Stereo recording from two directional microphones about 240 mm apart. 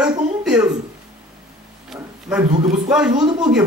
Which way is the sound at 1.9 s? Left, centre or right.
Centre.